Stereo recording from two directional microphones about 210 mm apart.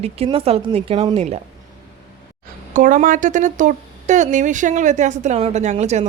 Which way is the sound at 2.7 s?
40° right (ahead or behind).